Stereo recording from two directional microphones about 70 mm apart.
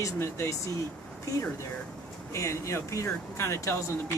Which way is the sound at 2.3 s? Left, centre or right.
Left.